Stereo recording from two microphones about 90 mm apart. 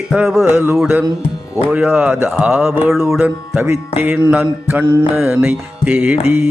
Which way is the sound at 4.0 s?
20° right (ahead or behind).